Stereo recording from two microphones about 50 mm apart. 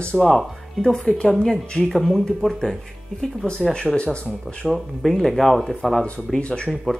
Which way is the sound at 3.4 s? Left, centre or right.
Left.